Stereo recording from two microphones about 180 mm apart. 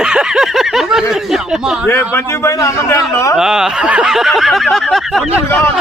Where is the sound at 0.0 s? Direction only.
5° right (ahead or behind).